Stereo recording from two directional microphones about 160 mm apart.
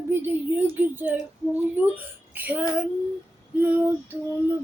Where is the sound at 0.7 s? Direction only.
15° right (ahead or behind).